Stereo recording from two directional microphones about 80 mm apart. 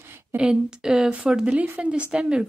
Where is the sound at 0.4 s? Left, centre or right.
Centre.